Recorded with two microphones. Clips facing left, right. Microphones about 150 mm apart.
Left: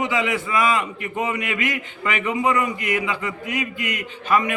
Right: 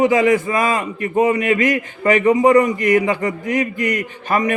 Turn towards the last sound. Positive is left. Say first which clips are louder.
# right 2 dB
turn(degrees=-45)  # may be behind; listen again after turning